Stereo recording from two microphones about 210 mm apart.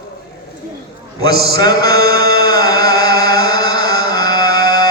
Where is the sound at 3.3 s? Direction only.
20° left (ahead or behind).